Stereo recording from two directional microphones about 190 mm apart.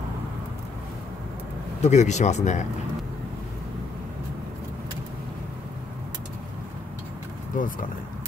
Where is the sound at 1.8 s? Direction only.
40° left (ahead or behind).